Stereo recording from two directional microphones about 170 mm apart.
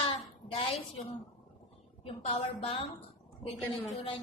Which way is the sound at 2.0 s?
35° left (ahead or behind).